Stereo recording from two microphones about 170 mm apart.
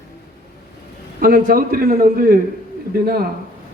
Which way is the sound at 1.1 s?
60° right (ahead or behind).